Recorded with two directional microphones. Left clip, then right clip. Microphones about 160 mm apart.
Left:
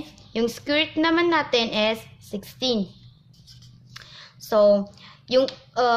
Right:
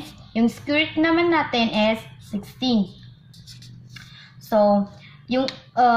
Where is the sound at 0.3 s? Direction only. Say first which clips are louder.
Right 1 dB; 70° left (ahead or behind).